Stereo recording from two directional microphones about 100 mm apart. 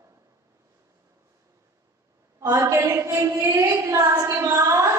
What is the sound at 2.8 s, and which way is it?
Mantra, 30° right (ahead or behind).